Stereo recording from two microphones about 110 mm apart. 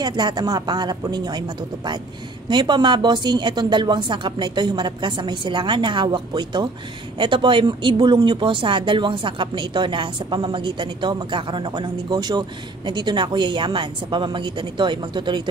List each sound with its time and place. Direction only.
0.0 s speech: 40° right (ahead or behind)
2.5 s speech: 45° right (ahead or behind)